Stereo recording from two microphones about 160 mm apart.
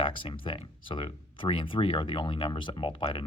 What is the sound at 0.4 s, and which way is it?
Speech, 35° left (ahead or behind).